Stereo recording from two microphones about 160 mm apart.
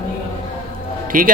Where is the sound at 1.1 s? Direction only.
60° right (ahead or behind).